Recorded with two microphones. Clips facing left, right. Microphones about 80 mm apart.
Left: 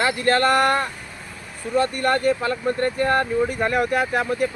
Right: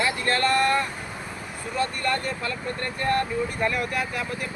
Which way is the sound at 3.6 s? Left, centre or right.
Left.